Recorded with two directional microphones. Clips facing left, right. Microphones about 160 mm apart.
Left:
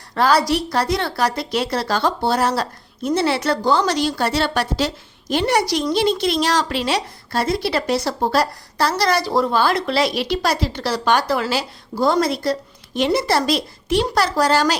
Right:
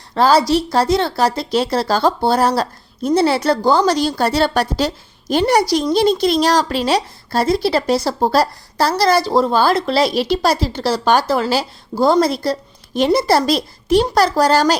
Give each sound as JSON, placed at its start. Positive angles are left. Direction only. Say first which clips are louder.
{"t": 0.1, "sound": "a woman's voice", "louder": "right 4 dB", "side_deg": -25}